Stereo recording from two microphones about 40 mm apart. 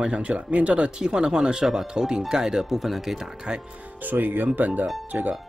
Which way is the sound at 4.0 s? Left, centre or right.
Right.